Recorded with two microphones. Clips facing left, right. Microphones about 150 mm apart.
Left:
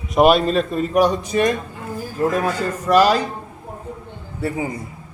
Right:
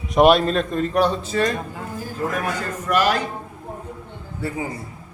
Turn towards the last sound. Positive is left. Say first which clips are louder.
# left 3 dB
turn(degrees=25)  # may be behind; listen again after turning